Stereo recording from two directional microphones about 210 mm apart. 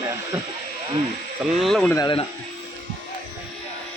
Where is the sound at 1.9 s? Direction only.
20° left (ahead or behind).